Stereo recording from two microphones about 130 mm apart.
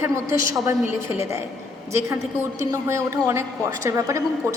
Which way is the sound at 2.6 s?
20° right (ahead or behind).